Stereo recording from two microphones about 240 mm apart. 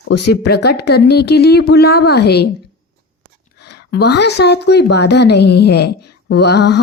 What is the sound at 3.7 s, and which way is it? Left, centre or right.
A woman's voice, left.